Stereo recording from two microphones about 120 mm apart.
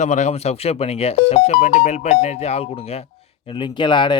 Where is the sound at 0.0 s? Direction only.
75° left (ahead or behind).